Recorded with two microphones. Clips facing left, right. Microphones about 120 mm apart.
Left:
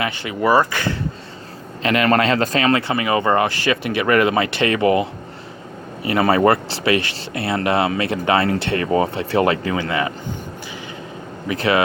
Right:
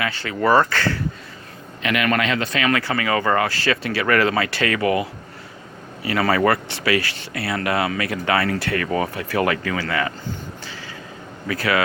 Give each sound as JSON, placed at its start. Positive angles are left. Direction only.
{"t": 0.0, "sound": "speech", "side_deg": 15}
{"t": 1.8, "sound": "speech", "side_deg": 35}
{"t": 11.4, "sound": "speech", "side_deg": 25}